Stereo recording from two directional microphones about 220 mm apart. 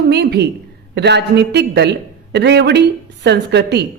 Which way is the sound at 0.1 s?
50° right (ahead or behind).